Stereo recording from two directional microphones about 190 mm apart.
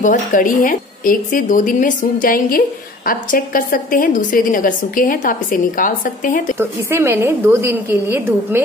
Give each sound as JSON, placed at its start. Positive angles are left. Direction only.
{"t": 0.0, "sound": "a woman's voice", "side_deg": 45}
{"t": 6.6, "sound": "a woman's voice", "side_deg": -10}